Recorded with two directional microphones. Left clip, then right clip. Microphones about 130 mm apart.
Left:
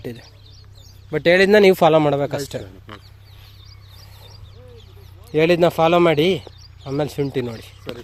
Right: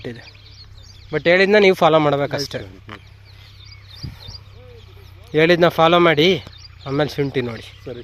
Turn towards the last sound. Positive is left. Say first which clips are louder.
# right 2 dB
turn(degrees=10)  # may be behind; listen again after turning